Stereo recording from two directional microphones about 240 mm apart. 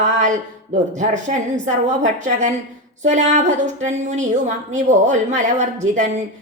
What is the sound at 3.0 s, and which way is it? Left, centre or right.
A woman's voice, right.